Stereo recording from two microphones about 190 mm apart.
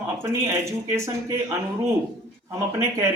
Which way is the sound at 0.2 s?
15° right (ahead or behind).